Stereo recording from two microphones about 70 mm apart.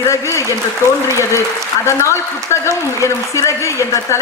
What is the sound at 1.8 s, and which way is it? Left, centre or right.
A man's voice, left.